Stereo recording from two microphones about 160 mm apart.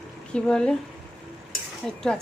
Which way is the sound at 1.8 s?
5° left (ahead or behind).